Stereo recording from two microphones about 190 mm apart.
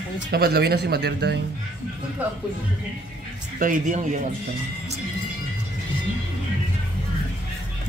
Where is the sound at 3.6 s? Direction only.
45° right (ahead or behind).